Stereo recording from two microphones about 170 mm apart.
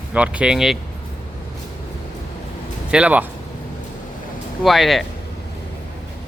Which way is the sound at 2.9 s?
5° right (ahead or behind).